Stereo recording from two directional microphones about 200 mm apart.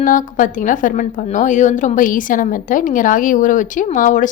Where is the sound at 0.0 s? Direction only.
40° left (ahead or behind).